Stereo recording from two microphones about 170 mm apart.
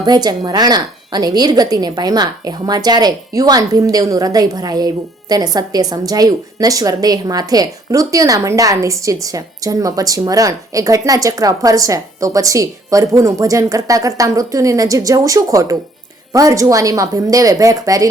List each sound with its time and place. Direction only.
0.0 s a woman's voice: 25° right (ahead or behind)